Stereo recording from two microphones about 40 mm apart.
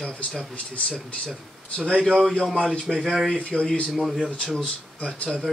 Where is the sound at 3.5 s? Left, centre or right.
Centre.